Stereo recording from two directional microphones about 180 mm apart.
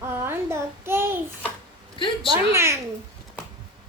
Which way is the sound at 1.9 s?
30° left (ahead or behind).